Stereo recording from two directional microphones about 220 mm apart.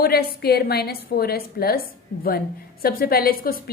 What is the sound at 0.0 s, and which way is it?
A woman's voice, 45° left (ahead or behind).